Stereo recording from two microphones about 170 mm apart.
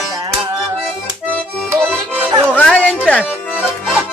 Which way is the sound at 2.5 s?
10° left (ahead or behind).